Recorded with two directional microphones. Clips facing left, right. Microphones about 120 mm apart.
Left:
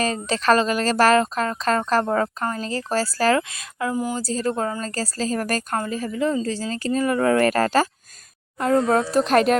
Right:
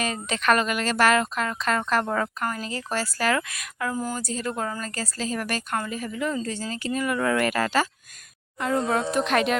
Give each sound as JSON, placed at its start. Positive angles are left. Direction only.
{"t": 0.0, "sound": "a woman's voice", "side_deg": 35}
{"t": 4.2, "sound": "a woman's voice", "side_deg": 35}